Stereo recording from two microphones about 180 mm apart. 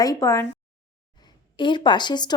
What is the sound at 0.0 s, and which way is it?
A woman's voice, 20° left (ahead or behind).